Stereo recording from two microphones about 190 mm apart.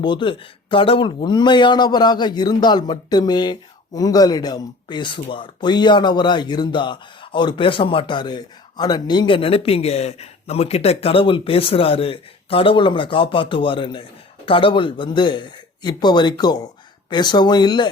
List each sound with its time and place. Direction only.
0.0 s speech: 25° left (ahead or behind)